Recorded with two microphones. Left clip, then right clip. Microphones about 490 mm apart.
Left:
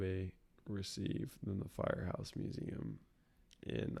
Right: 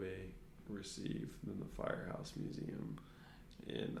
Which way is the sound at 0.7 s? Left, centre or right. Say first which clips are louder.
Left 3 dB; left.